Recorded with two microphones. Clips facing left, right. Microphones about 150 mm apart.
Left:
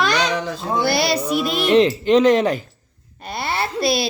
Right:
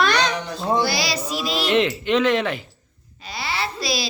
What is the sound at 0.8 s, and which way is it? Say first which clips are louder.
Music: left 5 dB; 55° left (ahead or behind).